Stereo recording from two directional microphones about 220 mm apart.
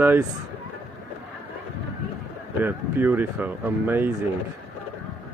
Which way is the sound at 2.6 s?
10° right (ahead or behind).